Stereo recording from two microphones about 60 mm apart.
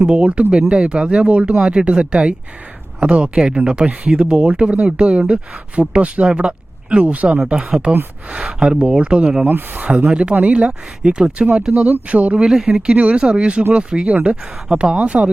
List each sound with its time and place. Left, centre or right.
0.0 s speech: centre
9.5 s speech: right
11.7 s speech: right
12.5 s speech: centre